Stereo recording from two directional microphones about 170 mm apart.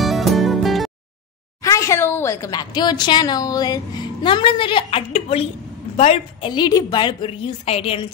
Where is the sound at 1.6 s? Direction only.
20° left (ahead or behind); by 6.5 s 40° left (ahead or behind).